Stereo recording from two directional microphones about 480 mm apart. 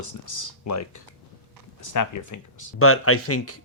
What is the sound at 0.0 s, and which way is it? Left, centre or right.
Speech, left.